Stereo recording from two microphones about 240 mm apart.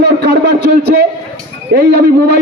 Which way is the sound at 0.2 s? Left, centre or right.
Right.